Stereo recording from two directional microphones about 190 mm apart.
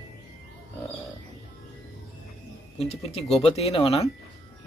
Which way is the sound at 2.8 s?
30° left (ahead or behind).